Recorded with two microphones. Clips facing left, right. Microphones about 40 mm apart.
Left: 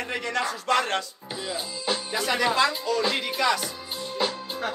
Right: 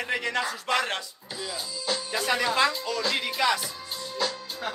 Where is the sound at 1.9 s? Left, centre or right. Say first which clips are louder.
Left 1 dB; left.